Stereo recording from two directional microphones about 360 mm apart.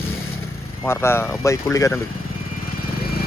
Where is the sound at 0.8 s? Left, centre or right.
Centre.